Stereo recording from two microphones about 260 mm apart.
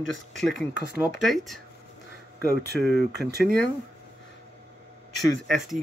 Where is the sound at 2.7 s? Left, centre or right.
Centre.